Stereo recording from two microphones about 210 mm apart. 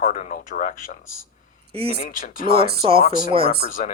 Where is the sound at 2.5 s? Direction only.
50° right (ahead or behind).